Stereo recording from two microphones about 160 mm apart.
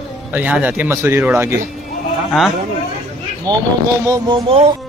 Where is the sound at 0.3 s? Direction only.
10° right (ahead or behind).